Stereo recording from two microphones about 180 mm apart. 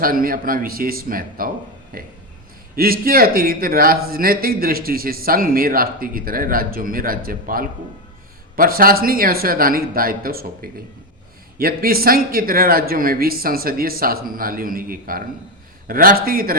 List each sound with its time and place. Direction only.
0.0 s a man's voice: 55° right (ahead or behind)